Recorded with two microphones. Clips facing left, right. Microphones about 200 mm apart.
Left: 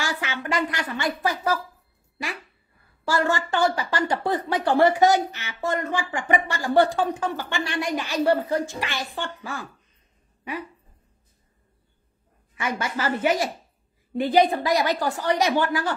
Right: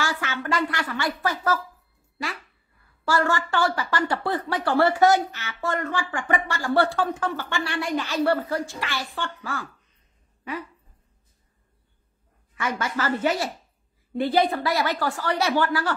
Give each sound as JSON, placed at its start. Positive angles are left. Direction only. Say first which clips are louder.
{"t": 0.0, "sound": "speech", "louder": "right 1 dB", "side_deg": 15}
{"t": 3.1, "sound": "speech", "louder": "even", "side_deg": 15}
{"t": 12.5, "sound": "speech", "louder": "even", "side_deg": 15}